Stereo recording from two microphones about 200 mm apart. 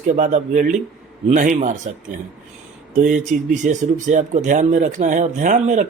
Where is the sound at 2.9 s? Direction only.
40° right (ahead or behind).